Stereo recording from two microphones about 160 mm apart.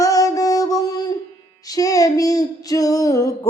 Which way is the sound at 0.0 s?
20° left (ahead or behind).